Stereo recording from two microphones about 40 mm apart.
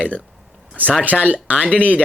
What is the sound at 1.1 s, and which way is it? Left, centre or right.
Speech, centre.